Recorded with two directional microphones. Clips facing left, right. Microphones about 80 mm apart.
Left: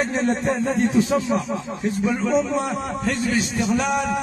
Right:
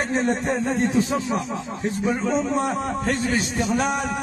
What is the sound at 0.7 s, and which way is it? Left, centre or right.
A man's voice, right.